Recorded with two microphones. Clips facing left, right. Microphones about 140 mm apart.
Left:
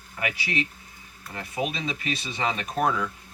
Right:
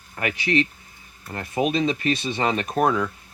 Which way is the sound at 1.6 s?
60° right (ahead or behind).